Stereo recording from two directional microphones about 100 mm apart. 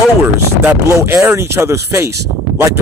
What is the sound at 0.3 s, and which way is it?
Speech, 25° right (ahead or behind).